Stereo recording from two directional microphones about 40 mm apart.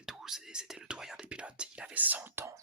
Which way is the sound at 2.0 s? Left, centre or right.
Right.